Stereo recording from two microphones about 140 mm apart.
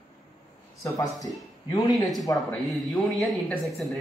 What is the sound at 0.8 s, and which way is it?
A man's voice, 25° left (ahead or behind).